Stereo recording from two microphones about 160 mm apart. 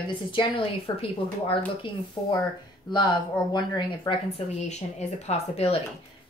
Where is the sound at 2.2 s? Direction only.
20° left (ahead or behind).